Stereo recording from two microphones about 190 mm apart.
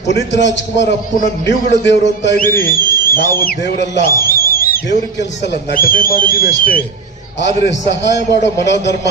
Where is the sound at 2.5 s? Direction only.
10° left (ahead or behind).